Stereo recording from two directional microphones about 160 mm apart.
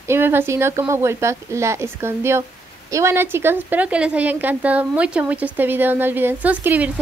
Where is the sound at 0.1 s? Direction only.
15° right (ahead or behind).